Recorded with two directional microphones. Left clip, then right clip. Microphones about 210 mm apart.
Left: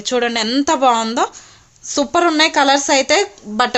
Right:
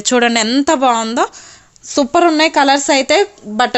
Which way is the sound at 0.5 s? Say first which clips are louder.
Left 2 dB; 20° right (ahead or behind).